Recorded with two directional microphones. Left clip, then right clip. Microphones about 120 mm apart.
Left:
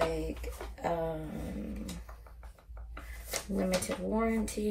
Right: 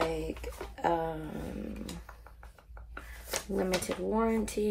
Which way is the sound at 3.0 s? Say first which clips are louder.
Right 2 dB; 20° right (ahead or behind).